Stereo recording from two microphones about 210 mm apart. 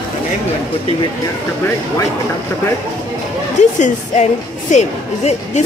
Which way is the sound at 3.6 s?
35° left (ahead or behind).